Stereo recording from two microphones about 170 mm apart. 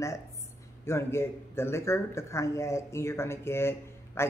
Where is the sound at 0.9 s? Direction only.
15° left (ahead or behind).